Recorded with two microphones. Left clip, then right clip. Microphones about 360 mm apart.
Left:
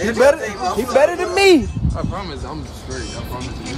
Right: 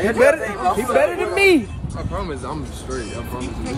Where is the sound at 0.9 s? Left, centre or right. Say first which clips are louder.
Left 6 dB; centre.